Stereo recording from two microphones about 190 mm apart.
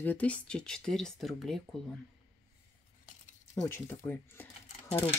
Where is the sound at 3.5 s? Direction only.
15° left (ahead or behind).